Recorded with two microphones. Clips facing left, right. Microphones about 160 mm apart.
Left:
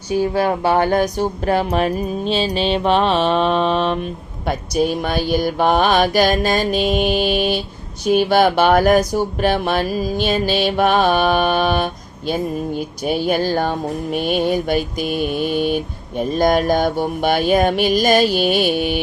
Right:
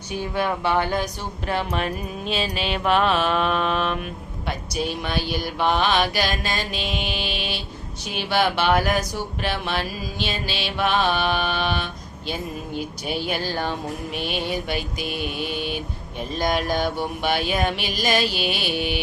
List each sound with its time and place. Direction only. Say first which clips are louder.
0.2 s speech: left 6 dB; 35° left (ahead or behind)
4.4 s music: left 9 dB; 45° left (ahead or behind)